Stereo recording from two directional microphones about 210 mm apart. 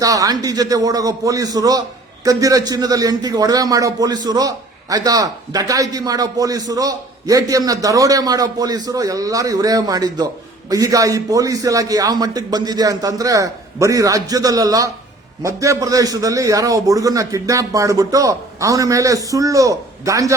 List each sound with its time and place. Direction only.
0.0 s a man's voice: 15° right (ahead or behind)